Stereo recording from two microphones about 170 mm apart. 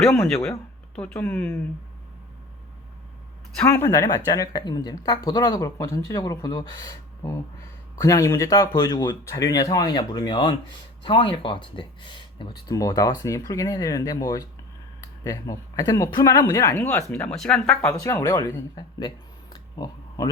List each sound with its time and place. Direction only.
0.9 s speech: 10° left (ahead or behind)
3.5 s speech: 10° left (ahead or behind)
17.2 s speech: 5° left (ahead or behind)
18.0 s speech: 20° left (ahead or behind)